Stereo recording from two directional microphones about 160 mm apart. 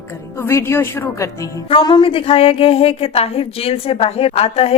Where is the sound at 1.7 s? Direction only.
30° left (ahead or behind).